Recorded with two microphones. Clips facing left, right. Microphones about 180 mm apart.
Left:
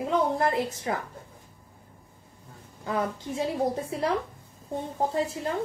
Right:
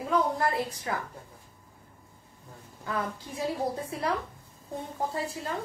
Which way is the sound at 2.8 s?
25° left (ahead or behind).